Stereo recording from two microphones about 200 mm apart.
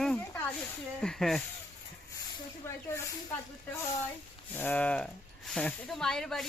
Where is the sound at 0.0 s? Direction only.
5° left (ahead or behind).